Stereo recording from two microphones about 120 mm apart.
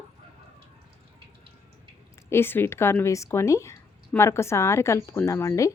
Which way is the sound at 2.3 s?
20° left (ahead or behind).